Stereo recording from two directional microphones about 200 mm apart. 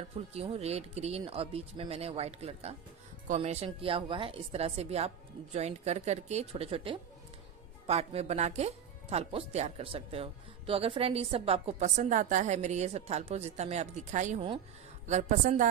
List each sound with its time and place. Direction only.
0.3 s speech: 30° right (ahead or behind)